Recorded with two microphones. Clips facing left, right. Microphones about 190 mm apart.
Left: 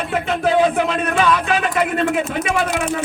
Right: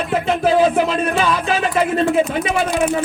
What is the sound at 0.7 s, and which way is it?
Music, 30° right (ahead or behind).